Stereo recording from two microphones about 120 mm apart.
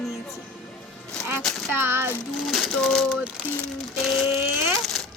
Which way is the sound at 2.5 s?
Centre (ahead or behind).